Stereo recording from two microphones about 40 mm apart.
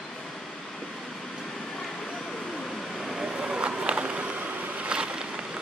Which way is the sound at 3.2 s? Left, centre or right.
Centre.